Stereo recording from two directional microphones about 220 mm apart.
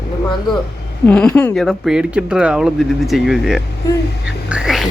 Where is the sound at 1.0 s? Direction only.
5° left (ahead or behind).